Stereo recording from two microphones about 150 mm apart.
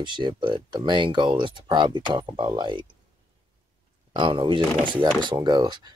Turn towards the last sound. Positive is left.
turn(degrees=-30)  # may be behind; listen again after turning